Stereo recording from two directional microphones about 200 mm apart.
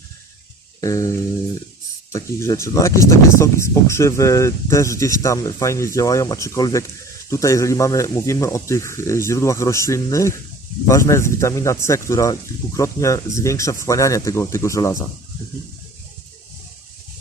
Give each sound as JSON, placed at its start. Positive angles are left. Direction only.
{"t": 0.8, "sound": "speech", "side_deg": 15}
{"t": 2.1, "sound": "speech", "side_deg": 15}